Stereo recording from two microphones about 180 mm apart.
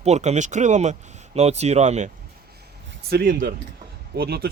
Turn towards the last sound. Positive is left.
turn(degrees=-60)  # may be behind; listen again after turning